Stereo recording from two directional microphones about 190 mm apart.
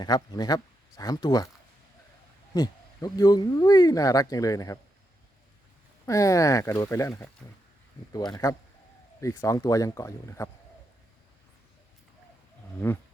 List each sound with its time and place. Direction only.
0.0 s speech: 20° left (ahead or behind)
2.6 s speech: 20° left (ahead or behind)
6.1 s speech: 15° left (ahead or behind)